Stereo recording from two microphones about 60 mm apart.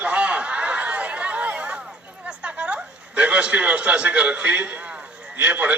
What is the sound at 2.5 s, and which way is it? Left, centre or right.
A man's voice, centre.